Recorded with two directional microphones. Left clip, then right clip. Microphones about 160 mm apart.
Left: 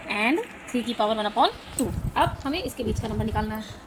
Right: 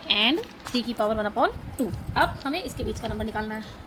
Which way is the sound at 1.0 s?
30° right (ahead or behind).